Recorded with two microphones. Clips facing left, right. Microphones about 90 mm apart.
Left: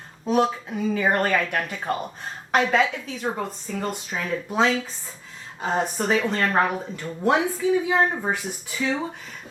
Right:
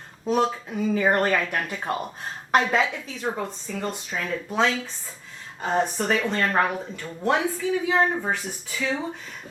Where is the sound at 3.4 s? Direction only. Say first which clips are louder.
Left 1 dB; 5° left (ahead or behind).